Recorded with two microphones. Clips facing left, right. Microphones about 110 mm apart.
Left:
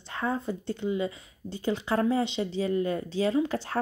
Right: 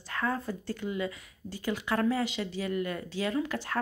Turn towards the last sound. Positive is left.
turn(degrees=30)  # may be behind; listen again after turning